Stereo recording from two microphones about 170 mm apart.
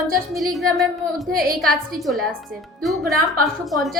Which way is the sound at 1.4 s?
60° right (ahead or behind).